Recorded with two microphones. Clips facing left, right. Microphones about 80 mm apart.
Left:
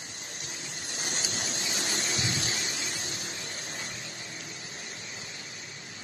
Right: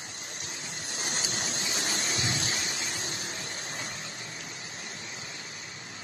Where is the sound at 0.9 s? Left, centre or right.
Right.